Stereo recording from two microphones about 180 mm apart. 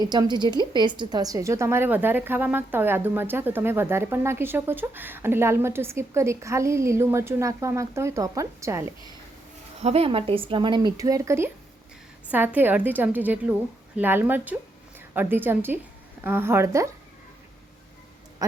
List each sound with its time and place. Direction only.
0.0 s a woman's voice: 20° right (ahead or behind)
9.8 s a woman's voice: 35° right (ahead or behind); by 16.9 s 15° right (ahead or behind)